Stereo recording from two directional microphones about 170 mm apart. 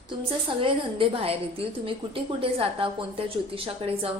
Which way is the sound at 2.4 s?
30° right (ahead or behind).